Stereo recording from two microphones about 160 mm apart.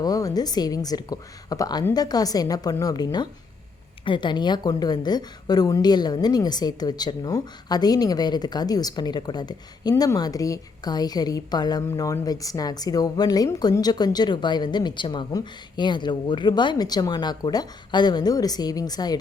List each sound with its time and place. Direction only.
0.0 s a woman's voice: 20° left (ahead or behind)